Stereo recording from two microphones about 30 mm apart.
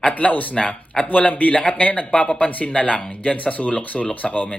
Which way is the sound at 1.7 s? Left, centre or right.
Left.